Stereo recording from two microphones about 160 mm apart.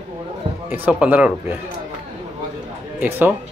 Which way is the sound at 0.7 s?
10° right (ahead or behind).